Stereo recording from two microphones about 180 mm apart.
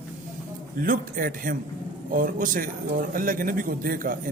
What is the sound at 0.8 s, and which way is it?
Speech, 50° right (ahead or behind).